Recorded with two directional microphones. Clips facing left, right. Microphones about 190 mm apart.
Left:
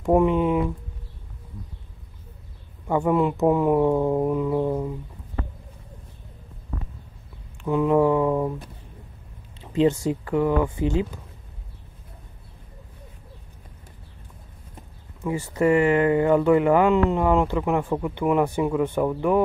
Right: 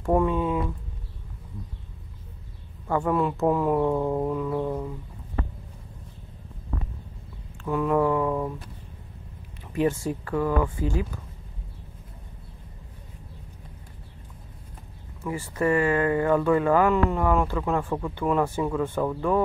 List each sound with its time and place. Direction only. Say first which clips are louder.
0.0 s speech: left 4 dB; 15° left (ahead or behind)
2.9 s speech: left 3 dB; 20° left (ahead or behind)
7.6 s speech: left 4 dB; 20° left (ahead or behind)
15.2 s speech: left 4 dB; 20° left (ahead or behind)